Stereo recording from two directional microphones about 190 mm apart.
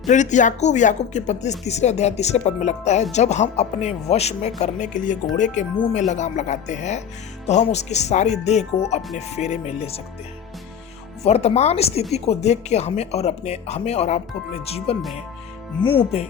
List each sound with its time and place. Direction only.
0.1 s speech: 40° left (ahead or behind)
11.2 s speech: 35° left (ahead or behind)